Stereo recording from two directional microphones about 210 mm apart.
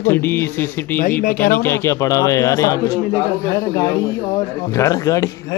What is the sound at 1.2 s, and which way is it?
Speech, 45° left (ahead or behind).